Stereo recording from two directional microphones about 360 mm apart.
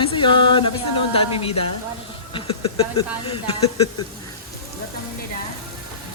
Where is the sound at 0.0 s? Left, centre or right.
Centre.